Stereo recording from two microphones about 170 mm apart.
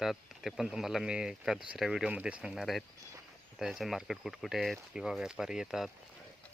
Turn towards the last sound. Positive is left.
turn(degrees=-5)  # may be behind; listen again after turning